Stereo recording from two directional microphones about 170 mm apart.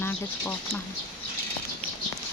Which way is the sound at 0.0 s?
10° left (ahead or behind).